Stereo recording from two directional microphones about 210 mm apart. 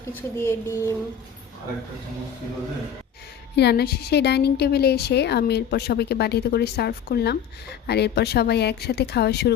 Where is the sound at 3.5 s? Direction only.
50° left (ahead or behind).